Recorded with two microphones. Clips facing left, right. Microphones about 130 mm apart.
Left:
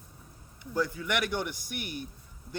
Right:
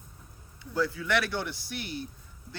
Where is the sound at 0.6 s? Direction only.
15° left (ahead or behind).